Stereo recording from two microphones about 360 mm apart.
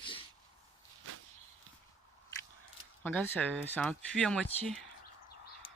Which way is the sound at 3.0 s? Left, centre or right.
Centre.